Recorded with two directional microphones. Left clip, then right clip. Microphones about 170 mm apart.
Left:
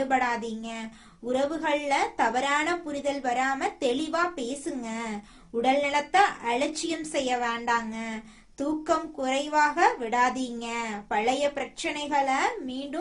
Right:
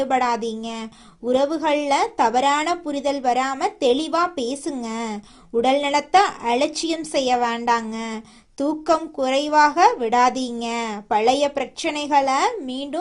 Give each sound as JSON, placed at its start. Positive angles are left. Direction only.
{"t": 0.0, "sound": "a woman's voice", "side_deg": -40}